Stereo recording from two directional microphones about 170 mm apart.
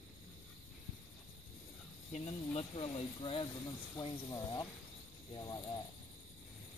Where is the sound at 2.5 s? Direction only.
35° left (ahead or behind).